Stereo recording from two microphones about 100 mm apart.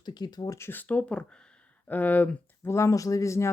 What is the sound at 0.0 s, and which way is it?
Speech, 45° left (ahead or behind).